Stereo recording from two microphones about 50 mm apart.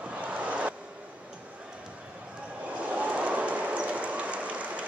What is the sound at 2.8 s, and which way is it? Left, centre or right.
Run, right.